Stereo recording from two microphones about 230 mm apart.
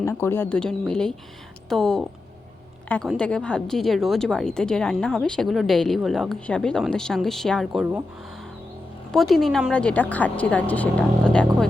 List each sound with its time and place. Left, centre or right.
0.0 s a woman's voice: centre
9.1 s a woman's voice: centre